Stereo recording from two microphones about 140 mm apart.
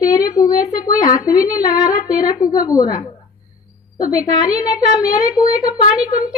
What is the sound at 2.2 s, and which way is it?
A woman's voice, 25° left (ahead or behind).